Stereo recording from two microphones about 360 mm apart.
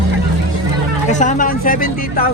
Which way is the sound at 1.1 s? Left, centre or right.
Centre.